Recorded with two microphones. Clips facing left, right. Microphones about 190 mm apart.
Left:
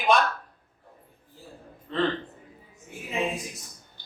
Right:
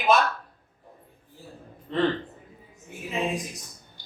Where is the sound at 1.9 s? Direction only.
15° right (ahead or behind).